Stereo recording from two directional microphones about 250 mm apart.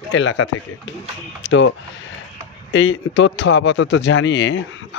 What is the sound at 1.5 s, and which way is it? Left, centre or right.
Speech, left.